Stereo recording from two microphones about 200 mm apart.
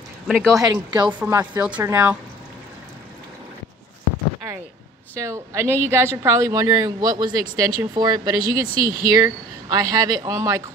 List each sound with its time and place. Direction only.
0.3 s speech: 5° left (ahead or behind)
0.6 s speech: 20° right (ahead or behind)
5.1 s speech: 15° right (ahead or behind)